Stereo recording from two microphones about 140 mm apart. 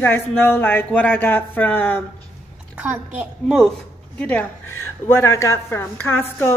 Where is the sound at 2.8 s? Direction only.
10° right (ahead or behind).